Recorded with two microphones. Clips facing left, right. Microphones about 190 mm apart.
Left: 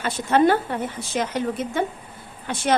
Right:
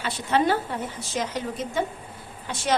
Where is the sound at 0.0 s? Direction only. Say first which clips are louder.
Left 5 dB; 50° left (ahead or behind).